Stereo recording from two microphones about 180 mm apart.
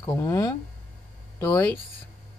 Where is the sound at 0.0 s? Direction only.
20° left (ahead or behind).